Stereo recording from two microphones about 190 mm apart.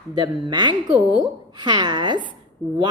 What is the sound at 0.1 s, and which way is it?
A woman's voice, 20° right (ahead or behind).